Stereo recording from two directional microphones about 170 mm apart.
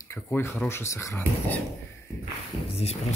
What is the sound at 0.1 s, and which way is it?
Speech, 15° left (ahead or behind).